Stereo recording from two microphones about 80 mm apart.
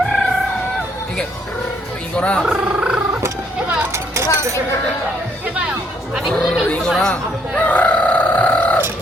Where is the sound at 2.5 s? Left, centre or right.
Centre.